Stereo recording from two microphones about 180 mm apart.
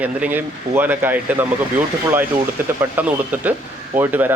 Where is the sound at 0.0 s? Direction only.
10° right (ahead or behind).